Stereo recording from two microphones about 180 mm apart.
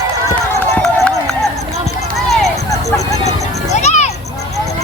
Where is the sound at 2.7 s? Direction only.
20° left (ahead or behind).